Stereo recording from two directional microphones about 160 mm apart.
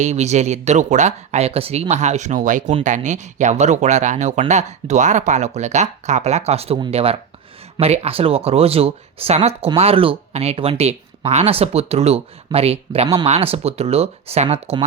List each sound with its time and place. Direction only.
0.0 s speech: 45° right (ahead or behind)